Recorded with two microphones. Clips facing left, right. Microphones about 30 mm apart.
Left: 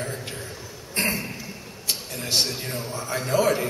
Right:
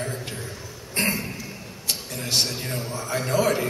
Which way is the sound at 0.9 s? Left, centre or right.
Centre.